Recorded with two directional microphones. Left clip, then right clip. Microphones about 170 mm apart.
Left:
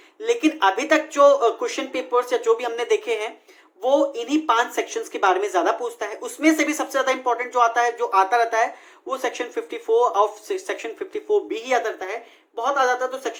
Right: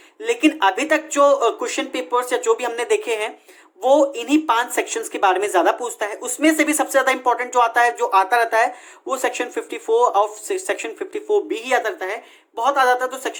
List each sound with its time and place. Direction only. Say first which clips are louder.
0.2 s speech: right 2 dB; 35° right (ahead or behind)
3.8 s speech: right 4 dB; 45° right (ahead or behind)